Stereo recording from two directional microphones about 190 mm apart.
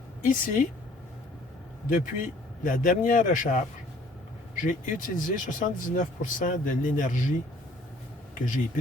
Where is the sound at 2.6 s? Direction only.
45° left (ahead or behind).